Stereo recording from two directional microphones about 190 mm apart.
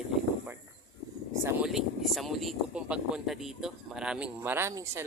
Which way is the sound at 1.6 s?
Centre (ahead or behind).